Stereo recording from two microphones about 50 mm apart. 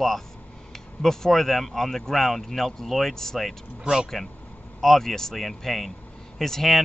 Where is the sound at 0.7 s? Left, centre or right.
Centre.